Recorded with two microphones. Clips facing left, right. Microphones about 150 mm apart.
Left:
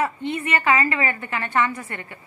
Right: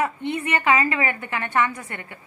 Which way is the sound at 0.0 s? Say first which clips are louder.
Even; 15° right (ahead or behind).